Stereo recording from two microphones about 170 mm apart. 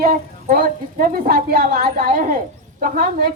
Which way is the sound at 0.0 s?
60° right (ahead or behind).